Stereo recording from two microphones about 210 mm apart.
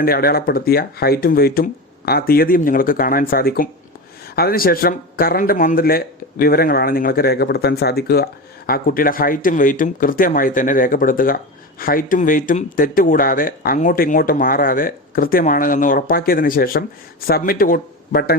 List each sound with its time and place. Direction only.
0.0 s speech: 45° left (ahead or behind)